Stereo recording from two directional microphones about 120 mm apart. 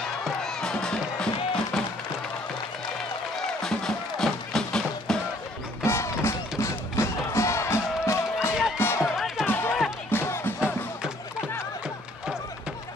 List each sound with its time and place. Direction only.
0.2 s music: 5° left (ahead or behind)
3.6 s music: 5° left (ahead or behind)
5.9 s music: 20° left (ahead or behind)
9.0 s music: 5° right (ahead or behind)
9.5 s music: 15° left (ahead or behind)